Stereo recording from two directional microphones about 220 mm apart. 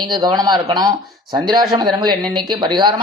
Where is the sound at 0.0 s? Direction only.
20° right (ahead or behind).